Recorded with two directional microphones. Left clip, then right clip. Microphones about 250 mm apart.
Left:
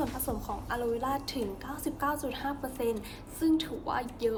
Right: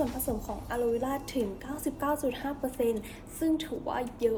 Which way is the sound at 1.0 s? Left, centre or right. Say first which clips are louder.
Right 1 dB; centre.